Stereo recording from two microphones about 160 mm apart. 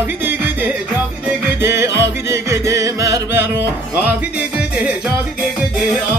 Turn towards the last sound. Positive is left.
turn(degrees=-5)  # may be behind; listen again after turning